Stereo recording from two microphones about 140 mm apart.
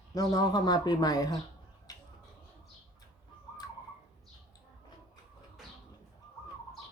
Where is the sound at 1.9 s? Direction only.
25° left (ahead or behind).